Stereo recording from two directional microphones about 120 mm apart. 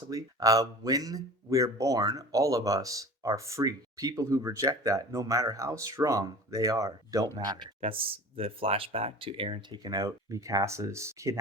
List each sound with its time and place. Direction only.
0.1 s speech: 30° right (ahead or behind)